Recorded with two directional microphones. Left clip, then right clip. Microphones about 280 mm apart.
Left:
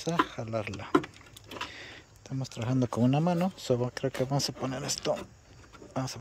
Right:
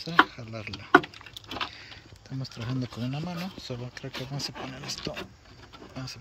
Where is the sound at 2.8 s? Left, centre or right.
Left.